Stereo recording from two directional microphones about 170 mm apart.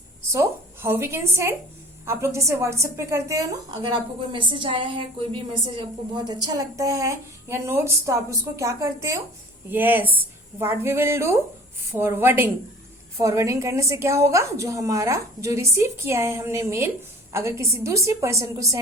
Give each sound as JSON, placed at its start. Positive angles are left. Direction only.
{"t": 0.3, "sound": "a woman's voice", "side_deg": -15}